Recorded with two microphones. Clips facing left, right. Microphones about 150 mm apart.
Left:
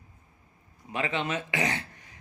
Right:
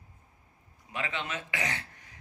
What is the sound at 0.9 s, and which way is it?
Speech, 25° left (ahead or behind).